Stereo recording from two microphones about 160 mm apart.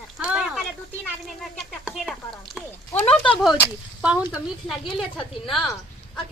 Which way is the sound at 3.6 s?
10° right (ahead or behind).